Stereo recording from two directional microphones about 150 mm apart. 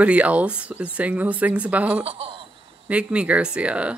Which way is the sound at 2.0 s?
40° right (ahead or behind).